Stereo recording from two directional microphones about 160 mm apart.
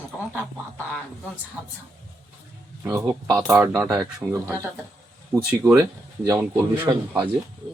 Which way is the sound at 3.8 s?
20° right (ahead or behind).